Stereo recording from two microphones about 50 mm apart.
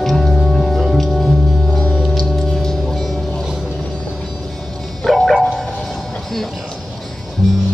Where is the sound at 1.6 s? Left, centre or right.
Centre.